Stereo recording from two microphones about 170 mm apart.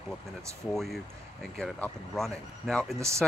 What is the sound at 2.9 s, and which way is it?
Speech, 15° right (ahead or behind).